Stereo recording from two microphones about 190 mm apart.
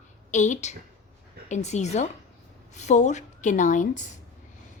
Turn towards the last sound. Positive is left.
turn(degrees=40)  # may be behind; listen again after turning